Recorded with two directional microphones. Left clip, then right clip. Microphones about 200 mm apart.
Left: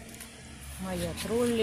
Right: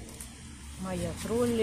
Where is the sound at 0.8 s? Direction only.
10° left (ahead or behind).